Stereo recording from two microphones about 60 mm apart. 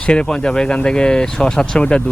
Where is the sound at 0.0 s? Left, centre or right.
Centre.